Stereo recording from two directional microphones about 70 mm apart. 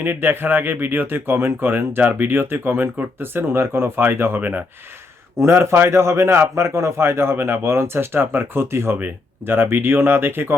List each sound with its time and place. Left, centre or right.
0.0 s speech: right